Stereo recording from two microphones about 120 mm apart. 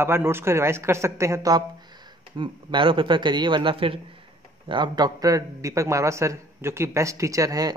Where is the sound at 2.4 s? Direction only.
40° right (ahead or behind).